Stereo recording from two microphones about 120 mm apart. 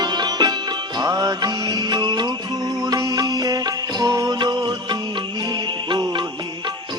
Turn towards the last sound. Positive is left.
turn(degrees=-40)  # may be behind; listen again after turning